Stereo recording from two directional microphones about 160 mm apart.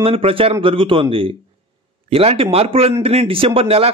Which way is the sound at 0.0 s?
35° right (ahead or behind).